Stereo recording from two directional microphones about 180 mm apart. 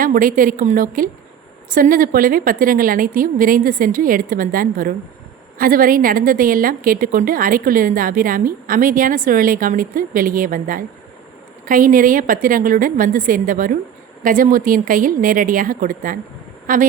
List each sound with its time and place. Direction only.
0.0 s a woman's voice: 50° right (ahead or behind)